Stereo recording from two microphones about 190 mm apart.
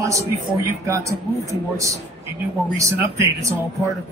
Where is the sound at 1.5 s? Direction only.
15° right (ahead or behind).